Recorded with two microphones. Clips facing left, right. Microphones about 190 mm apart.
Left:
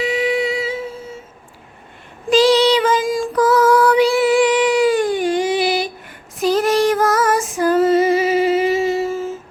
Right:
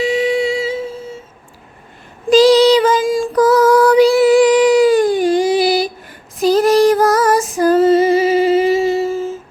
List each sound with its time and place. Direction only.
0.0 s humming: 30° right (ahead or behind)
2.3 s child singing: 40° right (ahead or behind)
6.4 s female singing: 35° right (ahead or behind)